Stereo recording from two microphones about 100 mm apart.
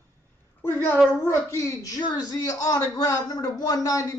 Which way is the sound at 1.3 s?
25° left (ahead or behind).